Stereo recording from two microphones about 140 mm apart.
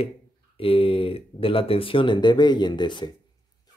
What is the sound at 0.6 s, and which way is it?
Speech, 40° left (ahead or behind).